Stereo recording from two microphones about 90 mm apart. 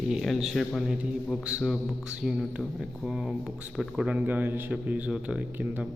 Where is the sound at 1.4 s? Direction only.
10° right (ahead or behind).